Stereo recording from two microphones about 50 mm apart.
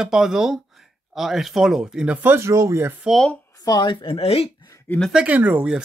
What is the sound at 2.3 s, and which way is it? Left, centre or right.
Speech, right.